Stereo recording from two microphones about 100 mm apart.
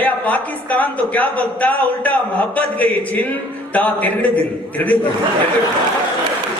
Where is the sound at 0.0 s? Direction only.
15° left (ahead or behind).